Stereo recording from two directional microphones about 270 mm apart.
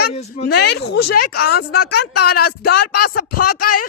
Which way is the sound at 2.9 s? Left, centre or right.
Left.